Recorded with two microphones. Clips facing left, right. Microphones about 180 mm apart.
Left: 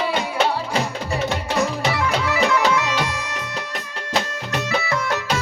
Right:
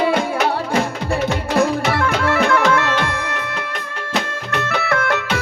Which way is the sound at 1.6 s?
55° right (ahead or behind).